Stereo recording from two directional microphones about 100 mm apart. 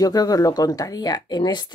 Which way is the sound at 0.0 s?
40° left (ahead or behind).